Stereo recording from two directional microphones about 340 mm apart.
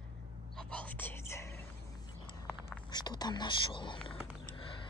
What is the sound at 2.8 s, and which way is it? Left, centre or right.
Speech, centre.